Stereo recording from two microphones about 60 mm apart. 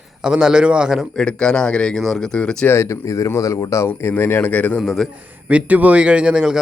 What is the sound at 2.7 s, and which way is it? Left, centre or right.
Speech, left.